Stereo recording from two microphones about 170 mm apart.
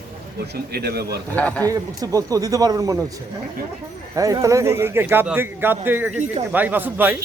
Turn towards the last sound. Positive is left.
turn(degrees=-10)  # may be behind; listen again after turning